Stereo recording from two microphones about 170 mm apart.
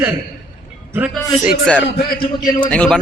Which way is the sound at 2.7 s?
5° left (ahead or behind).